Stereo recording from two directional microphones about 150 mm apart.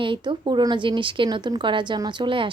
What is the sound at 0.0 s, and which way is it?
A woman's voice, 35° right (ahead or behind).